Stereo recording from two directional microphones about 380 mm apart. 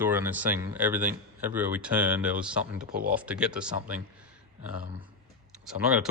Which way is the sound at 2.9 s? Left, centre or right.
Right.